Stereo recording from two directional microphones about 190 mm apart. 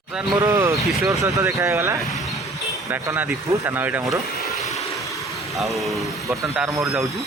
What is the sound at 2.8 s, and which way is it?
Speech, 15° right (ahead or behind).